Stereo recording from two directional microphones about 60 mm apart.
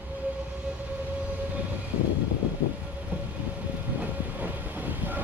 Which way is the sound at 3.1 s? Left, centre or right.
Right.